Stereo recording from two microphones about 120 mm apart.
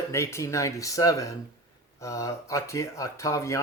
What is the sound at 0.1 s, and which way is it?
Speech, 25° left (ahead or behind).